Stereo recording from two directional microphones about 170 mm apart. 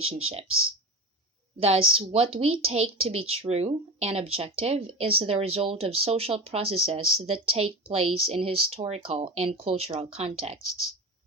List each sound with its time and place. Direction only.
0.1 s speech: 40° right (ahead or behind)
1.5 s speech: 35° right (ahead or behind)